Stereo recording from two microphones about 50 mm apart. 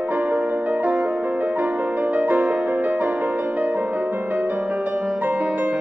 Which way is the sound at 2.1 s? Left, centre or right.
Right.